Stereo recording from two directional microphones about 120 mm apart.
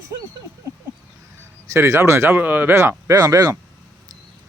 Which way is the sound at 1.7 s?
25° right (ahead or behind).